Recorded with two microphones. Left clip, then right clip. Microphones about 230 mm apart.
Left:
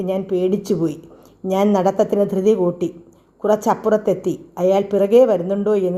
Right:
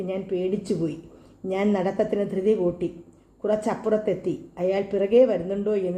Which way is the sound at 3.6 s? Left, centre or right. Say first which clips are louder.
Left 7 dB; left.